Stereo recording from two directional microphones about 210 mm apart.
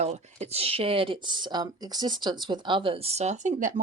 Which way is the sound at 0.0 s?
30° right (ahead or behind).